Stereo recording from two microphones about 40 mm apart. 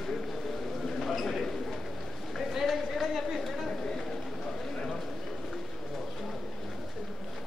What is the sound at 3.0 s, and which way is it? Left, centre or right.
Chatter, centre.